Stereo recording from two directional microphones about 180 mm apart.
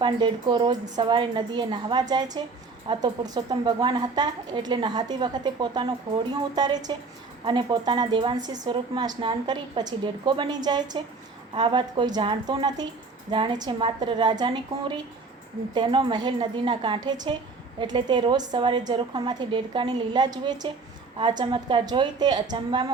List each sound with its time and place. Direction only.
0.0 s a woman's voice: 25° right (ahead or behind)